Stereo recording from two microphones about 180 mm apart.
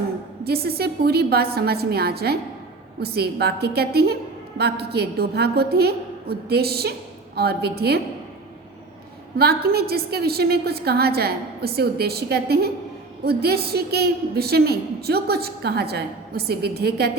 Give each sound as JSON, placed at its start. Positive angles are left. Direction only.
{"t": 0.4, "sound": "a woman's voice", "side_deg": -60}
{"t": 9.4, "sound": "a woman's voice", "side_deg": -60}